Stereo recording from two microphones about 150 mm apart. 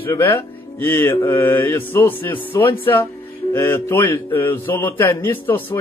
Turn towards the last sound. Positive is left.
turn(degrees=15)  # may be behind; listen again after turning